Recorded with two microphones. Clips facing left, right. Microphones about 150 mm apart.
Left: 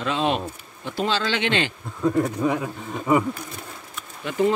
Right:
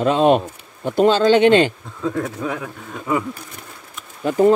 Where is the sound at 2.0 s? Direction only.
5° left (ahead or behind).